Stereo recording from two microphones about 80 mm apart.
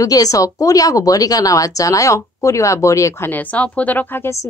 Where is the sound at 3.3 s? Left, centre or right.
Left.